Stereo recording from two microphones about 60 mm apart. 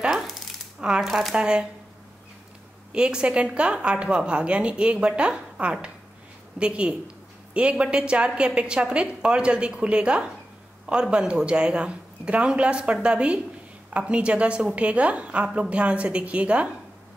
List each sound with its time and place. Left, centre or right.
0.0 s a sound: centre
1.0 s speech: centre
1.3 s a woman's voice: centre
2.9 s a woman's voice: centre